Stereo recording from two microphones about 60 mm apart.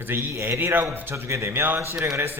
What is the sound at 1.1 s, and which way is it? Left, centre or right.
Speech, right.